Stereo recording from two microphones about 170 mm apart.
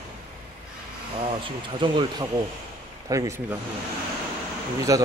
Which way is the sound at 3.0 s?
20° right (ahead or behind).